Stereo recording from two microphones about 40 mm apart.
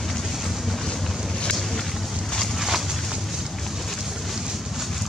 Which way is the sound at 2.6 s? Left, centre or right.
Centre.